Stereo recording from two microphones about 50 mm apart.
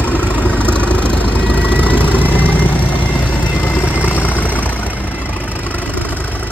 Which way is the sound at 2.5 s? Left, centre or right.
Left.